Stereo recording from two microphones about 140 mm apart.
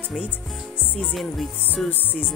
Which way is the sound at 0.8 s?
10° left (ahead or behind).